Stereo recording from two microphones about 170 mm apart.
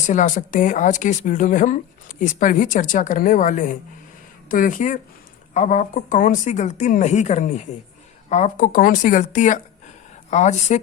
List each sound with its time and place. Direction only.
0.1 s speech: 45° left (ahead or behind)